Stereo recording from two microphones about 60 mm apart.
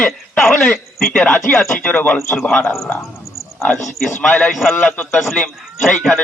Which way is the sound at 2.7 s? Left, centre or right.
Left.